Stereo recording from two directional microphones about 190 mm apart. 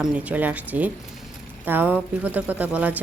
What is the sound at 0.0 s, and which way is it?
A woman's voice, 10° right (ahead or behind).